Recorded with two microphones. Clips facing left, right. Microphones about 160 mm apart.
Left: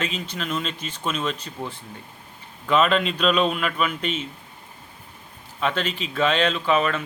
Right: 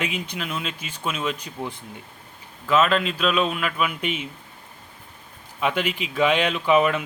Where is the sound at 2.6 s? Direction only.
Centre (ahead or behind).